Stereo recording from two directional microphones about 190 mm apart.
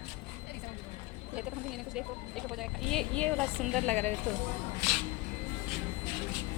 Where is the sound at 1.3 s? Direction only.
Centre (ahead or behind).